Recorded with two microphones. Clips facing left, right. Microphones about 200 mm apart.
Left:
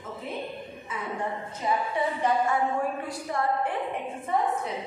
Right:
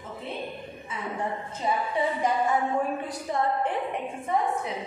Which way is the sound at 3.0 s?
20° right (ahead or behind).